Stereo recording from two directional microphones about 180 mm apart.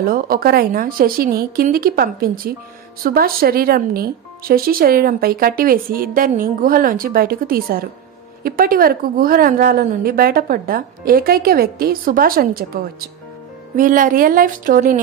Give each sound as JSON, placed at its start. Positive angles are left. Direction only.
{"t": 0.0, "sound": "a woman's voice", "side_deg": -55}